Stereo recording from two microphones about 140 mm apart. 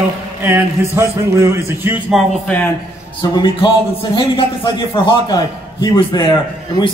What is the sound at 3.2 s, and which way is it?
A man's voice, 35° left (ahead or behind).